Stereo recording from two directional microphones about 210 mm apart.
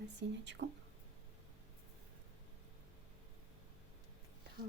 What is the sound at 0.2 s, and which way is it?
Speech, 55° right (ahead or behind).